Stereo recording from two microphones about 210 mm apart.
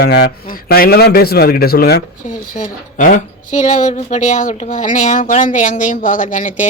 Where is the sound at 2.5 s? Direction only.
40° left (ahead or behind).